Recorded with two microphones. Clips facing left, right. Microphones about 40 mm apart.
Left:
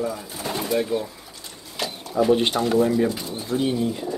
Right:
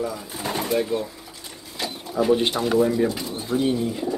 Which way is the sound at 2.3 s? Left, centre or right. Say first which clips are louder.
Even; centre.